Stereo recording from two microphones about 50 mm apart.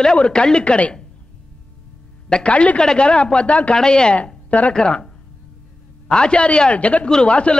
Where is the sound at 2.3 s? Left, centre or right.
Centre.